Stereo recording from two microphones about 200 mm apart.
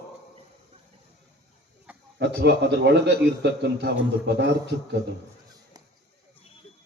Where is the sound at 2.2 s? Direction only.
60° right (ahead or behind).